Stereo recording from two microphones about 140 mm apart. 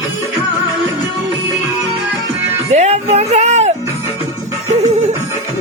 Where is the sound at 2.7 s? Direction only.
50° right (ahead or behind).